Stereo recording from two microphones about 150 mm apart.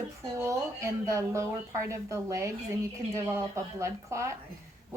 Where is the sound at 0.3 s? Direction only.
20° right (ahead or behind).